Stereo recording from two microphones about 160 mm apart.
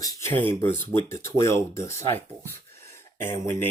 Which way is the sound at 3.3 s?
15° left (ahead or behind).